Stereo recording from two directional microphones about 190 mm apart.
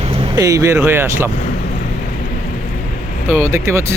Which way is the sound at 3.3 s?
15° right (ahead or behind).